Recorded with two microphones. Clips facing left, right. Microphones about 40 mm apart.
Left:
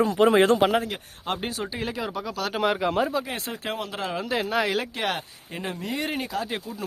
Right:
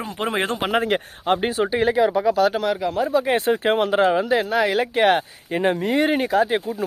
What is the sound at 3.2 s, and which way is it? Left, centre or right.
Speech, right.